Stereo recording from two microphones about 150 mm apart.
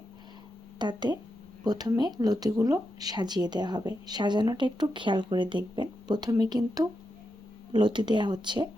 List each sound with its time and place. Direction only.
0.8 s a woman's voice: 30° right (ahead or behind)